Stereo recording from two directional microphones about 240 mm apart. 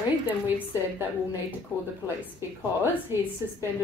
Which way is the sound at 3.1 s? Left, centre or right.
Centre.